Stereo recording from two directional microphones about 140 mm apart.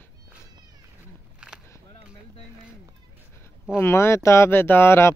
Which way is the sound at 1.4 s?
10° right (ahead or behind).